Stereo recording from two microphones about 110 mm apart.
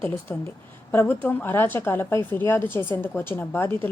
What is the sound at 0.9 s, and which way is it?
A woman's voice, 20° left (ahead or behind).